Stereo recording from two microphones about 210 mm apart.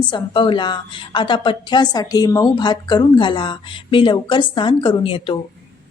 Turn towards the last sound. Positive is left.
turn(degrees=25)  # may be behind; listen again after turning